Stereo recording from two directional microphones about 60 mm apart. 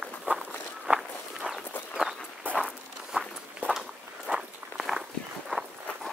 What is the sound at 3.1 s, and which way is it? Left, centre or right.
Walk, centre.